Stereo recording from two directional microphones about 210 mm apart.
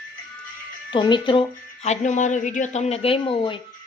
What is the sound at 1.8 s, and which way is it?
A woman's voice, 35° left (ahead or behind).